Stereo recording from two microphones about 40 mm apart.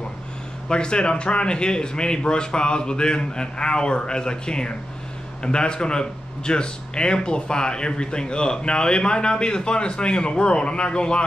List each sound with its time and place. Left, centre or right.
0.7 s speech: left